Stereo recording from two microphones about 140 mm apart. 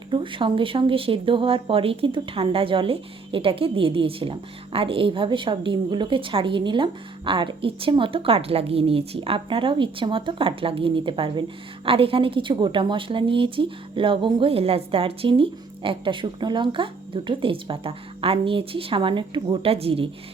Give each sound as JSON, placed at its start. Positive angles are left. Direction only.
{"t": 0.1, "sound": "speech", "side_deg": -35}